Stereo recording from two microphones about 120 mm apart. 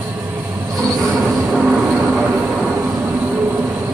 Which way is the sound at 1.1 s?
Centre (ahead or behind).